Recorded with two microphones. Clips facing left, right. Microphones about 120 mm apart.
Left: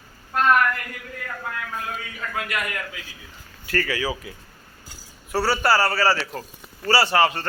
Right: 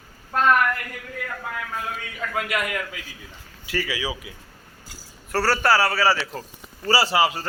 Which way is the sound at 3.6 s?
5° right (ahead or behind).